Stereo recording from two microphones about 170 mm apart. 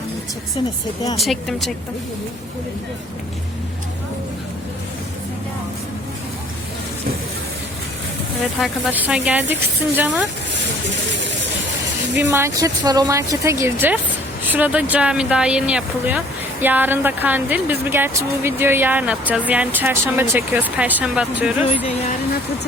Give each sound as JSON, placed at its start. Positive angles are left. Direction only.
{"t": 1.2, "sound": "speech", "side_deg": 0}
{"t": 8.5, "sound": "speech", "side_deg": 0}
{"t": 12.1, "sound": "speech", "side_deg": -15}